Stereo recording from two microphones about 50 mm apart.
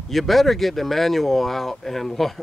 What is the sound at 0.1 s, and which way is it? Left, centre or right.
Speech, centre.